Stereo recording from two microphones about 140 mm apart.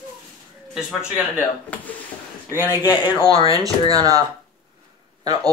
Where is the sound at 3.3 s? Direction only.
45° left (ahead or behind).